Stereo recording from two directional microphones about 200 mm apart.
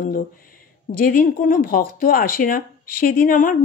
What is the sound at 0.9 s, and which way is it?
Speech, 45° left (ahead or behind).